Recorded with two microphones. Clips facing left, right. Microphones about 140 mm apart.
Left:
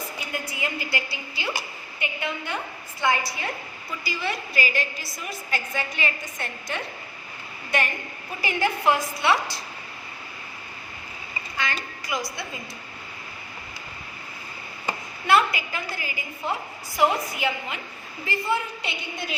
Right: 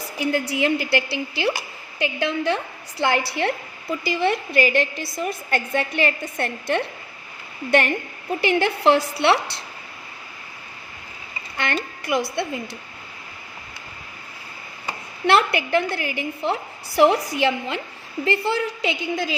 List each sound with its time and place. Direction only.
0.2 s a woman's voice: 90° right
3.0 s a woman's voice: 80° right
4.0 s a woman's voice: 55° right (ahead or behind)
8.4 s a woman's voice: 75° right (ahead or behind)
11.5 s a woman's voice: 60° right (ahead or behind)
15.3 s a woman's voice: 70° right (ahead or behind); by 19.3 s 90° right